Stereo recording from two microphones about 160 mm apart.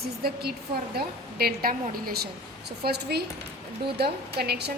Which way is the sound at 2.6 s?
90° right.